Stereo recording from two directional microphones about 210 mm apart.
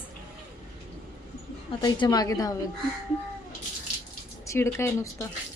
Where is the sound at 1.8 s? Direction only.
20° left (ahead or behind).